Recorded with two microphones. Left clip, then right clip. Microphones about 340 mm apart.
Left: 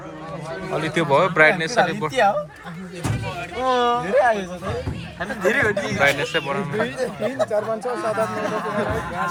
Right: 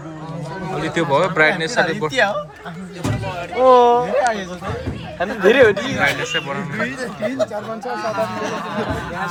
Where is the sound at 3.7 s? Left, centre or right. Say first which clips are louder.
Right 8 dB; centre.